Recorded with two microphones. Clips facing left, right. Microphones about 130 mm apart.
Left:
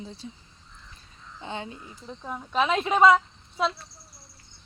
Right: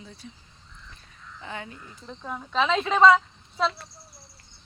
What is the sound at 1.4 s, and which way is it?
Speech, 25° left (ahead or behind).